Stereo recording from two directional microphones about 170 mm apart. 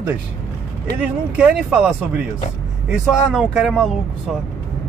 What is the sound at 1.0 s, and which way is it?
Speech, 10° right (ahead or behind).